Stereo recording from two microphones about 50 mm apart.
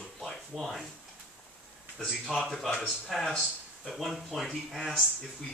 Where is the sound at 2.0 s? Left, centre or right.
Centre.